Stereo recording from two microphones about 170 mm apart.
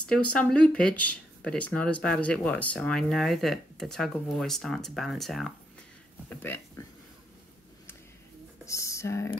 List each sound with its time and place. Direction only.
0.0 s speech: 5° left (ahead or behind)
6.2 s speech: 10° left (ahead or behind)
8.6 s a sound: 20° left (ahead or behind)